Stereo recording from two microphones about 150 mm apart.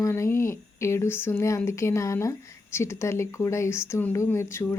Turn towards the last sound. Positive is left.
turn(degrees=20)  # may be behind; listen again after turning